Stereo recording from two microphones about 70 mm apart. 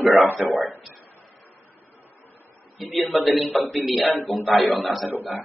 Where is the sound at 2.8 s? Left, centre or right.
Centre.